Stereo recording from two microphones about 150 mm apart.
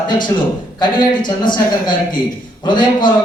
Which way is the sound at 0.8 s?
30° left (ahead or behind).